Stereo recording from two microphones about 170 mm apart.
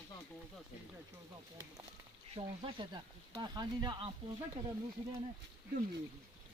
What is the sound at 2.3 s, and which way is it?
Speech, 30° right (ahead or behind).